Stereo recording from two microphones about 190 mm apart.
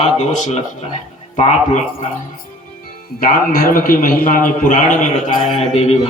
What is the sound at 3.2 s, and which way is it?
A man's voice, 50° left (ahead or behind).